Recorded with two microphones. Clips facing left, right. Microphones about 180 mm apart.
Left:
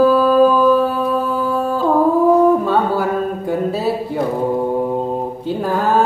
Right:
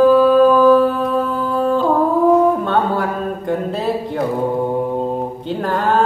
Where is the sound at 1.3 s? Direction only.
5° left (ahead or behind).